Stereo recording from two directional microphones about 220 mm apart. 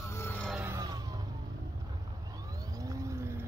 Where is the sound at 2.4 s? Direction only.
15° right (ahead or behind).